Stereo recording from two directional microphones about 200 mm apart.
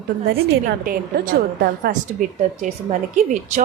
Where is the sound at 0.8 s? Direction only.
45° right (ahead or behind).